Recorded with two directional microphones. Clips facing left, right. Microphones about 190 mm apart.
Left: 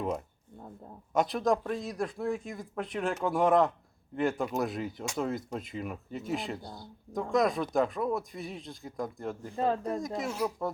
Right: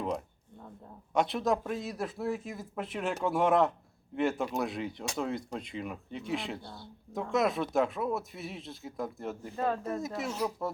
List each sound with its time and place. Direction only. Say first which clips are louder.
1.1 s speech: left 1 dB; centre (ahead or behind)
9.6 s speech: left 2 dB; 25° left (ahead or behind)
10.2 s speech: left 1 dB; 10° left (ahead or behind)